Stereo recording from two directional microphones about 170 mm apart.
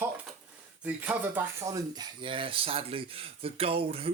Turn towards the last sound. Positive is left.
turn(degrees=-35)  # may be behind; listen again after turning